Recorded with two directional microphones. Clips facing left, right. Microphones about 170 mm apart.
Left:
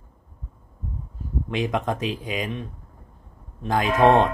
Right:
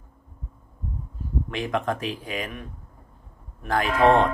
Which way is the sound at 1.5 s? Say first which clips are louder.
Left 2 dB; 20° left (ahead or behind).